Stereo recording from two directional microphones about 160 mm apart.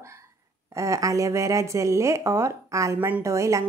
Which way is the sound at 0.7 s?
20° right (ahead or behind).